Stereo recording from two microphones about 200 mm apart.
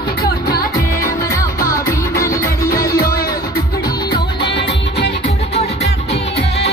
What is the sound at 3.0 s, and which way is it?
Music, 50° left (ahead or behind).